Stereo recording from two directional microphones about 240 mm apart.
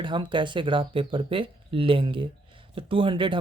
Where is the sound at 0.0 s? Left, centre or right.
Centre.